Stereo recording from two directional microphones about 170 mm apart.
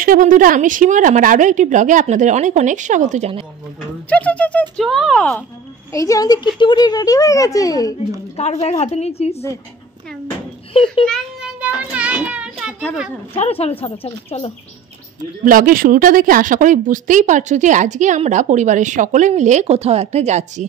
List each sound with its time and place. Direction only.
0.0 s a woman's voice: 55° right (ahead or behind); by 3.4 s 40° right (ahead or behind)
4.1 s speech: 10° left (ahead or behind)
5.9 s speech: 20° left (ahead or behind)
8.4 s speech: 40° left (ahead or behind)
10.7 s a child's voice: 30° left (ahead or behind)
11.1 s child singing: 5° right (ahead or behind)
13.3 s speech: 35° left (ahead or behind)
15.4 s a woman's voice: 55° right (ahead or behind)